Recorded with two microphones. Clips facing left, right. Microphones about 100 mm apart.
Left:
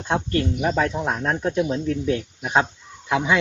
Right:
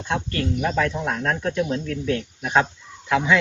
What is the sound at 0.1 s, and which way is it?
Speech, 25° left (ahead or behind).